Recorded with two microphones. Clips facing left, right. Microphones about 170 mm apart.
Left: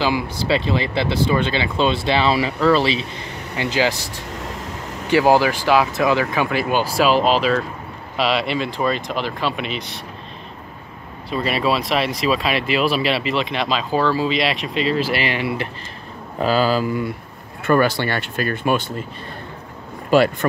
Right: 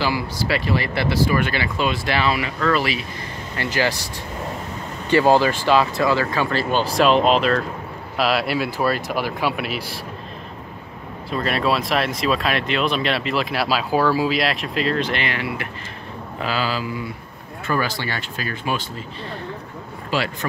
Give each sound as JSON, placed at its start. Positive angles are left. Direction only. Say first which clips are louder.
{"t": 0.0, "sound": "speech", "louder": "left 2 dB", "side_deg": 20}
{"t": 3.5, "sound": "speech", "louder": "left 2 dB", "side_deg": 15}
{"t": 5.1, "sound": "speech", "louder": "left 1 dB", "side_deg": 10}
{"t": 11.2, "sound": "speech", "louder": "left 1 dB", "side_deg": 0}
{"t": 15.2, "sound": "speech", "louder": "left 4 dB", "side_deg": 25}
{"t": 16.3, "sound": "speech", "louder": "left 7 dB", "side_deg": 40}
{"t": 20.1, "sound": "speech", "louder": "left 9 dB", "side_deg": 50}